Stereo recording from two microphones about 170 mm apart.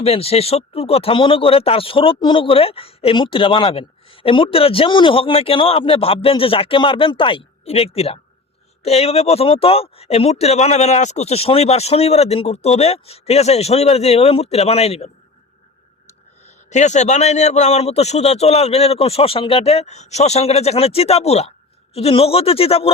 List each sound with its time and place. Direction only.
0.0 s speech: 35° left (ahead or behind)
16.6 s speech: 45° left (ahead or behind)